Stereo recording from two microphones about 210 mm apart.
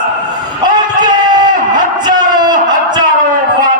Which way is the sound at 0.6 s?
20° right (ahead or behind).